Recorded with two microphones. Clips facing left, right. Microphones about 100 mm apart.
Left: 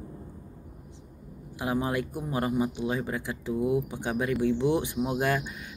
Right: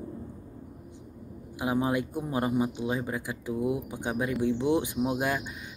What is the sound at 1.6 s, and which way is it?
Speech, 15° right (ahead or behind).